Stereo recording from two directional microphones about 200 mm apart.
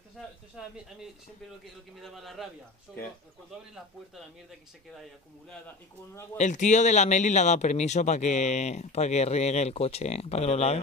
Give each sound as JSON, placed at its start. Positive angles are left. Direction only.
{"t": 0.6, "sound": "speech", "side_deg": -5}
{"t": 2.0, "sound": "speech", "side_deg": 0}
{"t": 3.7, "sound": "speech", "side_deg": 0}
{"t": 6.3, "sound": "speech", "side_deg": 35}